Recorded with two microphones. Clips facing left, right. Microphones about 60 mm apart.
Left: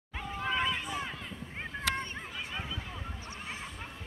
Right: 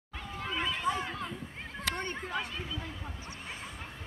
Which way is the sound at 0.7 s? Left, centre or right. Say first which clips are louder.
Right 3 dB; centre.